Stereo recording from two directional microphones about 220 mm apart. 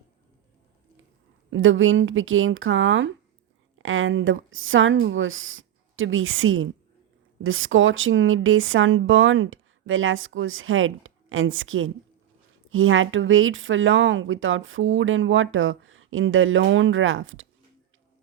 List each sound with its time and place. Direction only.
1.5 s speech: 60° right (ahead or behind)